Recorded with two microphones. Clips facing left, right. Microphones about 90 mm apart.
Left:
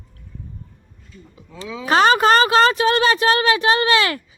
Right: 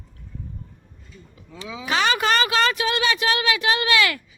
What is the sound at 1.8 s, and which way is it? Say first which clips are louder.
Speech: left 7 dB; 40° left (ahead or behind).